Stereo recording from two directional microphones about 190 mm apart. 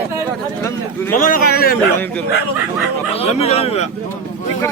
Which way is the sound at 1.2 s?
50° left (ahead or behind).